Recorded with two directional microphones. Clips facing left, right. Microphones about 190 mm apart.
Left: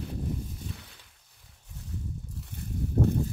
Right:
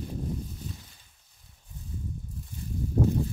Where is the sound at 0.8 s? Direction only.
75° left (ahead or behind).